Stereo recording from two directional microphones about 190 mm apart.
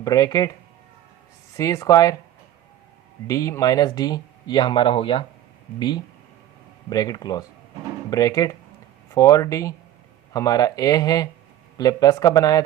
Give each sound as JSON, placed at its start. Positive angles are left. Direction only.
{"t": 0.0, "sound": "speech", "side_deg": 20}
{"t": 1.5, "sound": "speech", "side_deg": 15}
{"t": 3.2, "sound": "speech", "side_deg": 15}
{"t": 6.9, "sound": "speech", "side_deg": 20}